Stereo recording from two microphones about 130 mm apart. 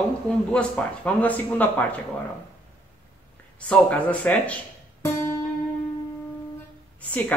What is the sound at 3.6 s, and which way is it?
Speech, 10° left (ahead or behind).